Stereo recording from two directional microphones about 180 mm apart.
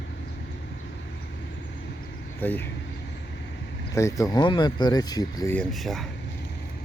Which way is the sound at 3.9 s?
15° left (ahead or behind).